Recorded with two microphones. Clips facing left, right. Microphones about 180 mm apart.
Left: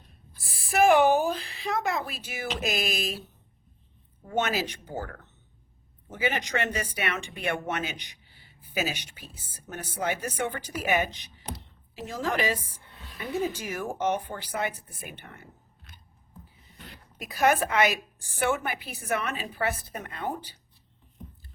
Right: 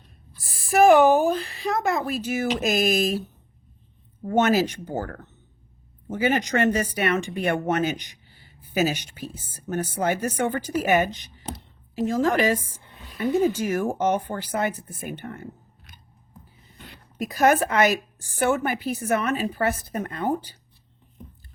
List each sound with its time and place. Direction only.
0.4 s a woman's voice: 45° right (ahead or behind)
4.3 s speech: 45° right (ahead or behind)
6.1 s speech: 45° right (ahead or behind)
12.8 s a sound: 15° right (ahead or behind)
13.1 s speech: 45° right (ahead or behind)
17.2 s speech: 45° right (ahead or behind)